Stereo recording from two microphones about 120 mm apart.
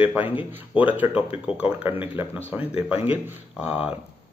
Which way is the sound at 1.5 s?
55° left (ahead or behind).